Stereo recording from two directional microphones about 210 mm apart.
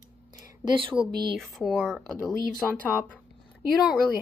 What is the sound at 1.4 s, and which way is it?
A woman's voice, centre (ahead or behind).